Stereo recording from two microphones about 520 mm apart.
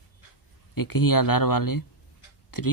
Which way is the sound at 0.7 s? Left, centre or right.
Left.